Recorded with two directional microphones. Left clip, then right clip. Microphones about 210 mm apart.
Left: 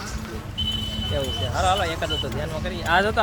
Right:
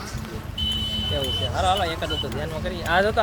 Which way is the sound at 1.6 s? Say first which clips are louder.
Left 1 dB; 15° right (ahead or behind).